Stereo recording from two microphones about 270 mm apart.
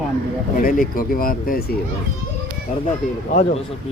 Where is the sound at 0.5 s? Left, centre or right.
Left.